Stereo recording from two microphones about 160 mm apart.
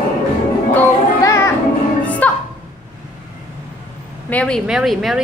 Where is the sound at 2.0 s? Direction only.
10° left (ahead or behind).